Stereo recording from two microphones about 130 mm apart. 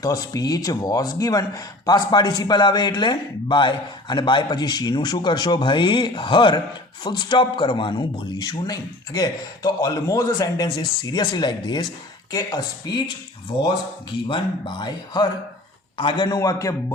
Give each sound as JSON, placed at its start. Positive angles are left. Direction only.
{"t": 0.0, "sound": "speech", "side_deg": 30}
{"t": 14.3, "sound": "a man's voice", "side_deg": 35}